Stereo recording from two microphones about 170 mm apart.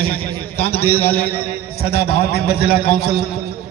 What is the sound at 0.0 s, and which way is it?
A man's voice, 65° left (ahead or behind).